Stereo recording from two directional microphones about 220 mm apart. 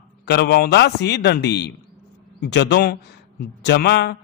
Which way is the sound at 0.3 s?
50° left (ahead or behind).